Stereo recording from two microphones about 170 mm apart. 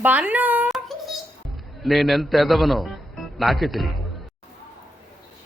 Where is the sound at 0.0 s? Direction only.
10° right (ahead or behind).